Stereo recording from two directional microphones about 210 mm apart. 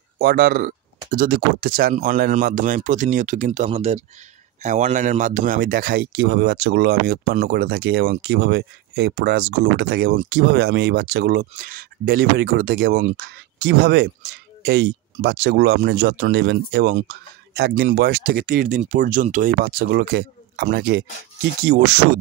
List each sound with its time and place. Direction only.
0.2 s a man's voice: 45° right (ahead or behind)